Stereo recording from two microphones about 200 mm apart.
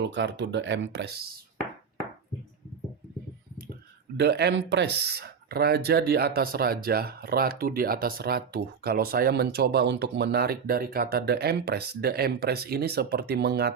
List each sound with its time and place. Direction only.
0.0 s speech: 65° right (ahead or behind)
4.2 s speech: 55° right (ahead or behind)